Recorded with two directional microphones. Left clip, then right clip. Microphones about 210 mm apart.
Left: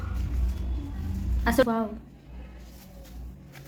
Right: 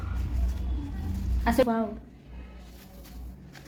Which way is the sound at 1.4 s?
10° left (ahead or behind).